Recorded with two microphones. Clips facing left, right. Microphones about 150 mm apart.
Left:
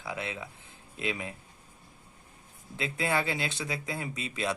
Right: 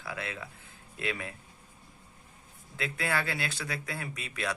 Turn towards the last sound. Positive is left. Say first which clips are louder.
# left 3 dB
turn(degrees=25)  # may be behind; listen again after turning